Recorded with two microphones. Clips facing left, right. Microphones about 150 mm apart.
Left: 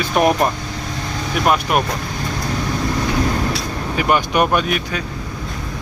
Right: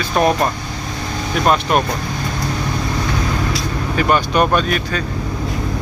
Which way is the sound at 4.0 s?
15° left (ahead or behind).